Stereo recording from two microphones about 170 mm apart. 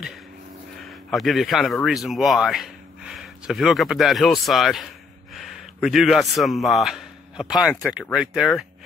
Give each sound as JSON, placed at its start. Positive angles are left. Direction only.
{"t": 0.8, "sound": "speech", "side_deg": 0}